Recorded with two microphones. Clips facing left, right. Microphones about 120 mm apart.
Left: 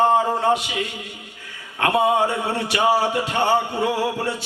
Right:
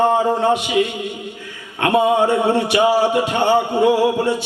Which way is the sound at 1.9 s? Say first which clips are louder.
Right 5 dB; 20° right (ahead or behind).